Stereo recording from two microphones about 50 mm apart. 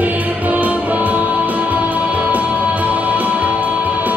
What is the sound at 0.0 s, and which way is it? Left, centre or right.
Music, right.